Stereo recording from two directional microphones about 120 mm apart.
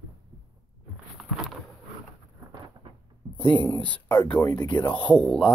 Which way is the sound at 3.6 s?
10° left (ahead or behind).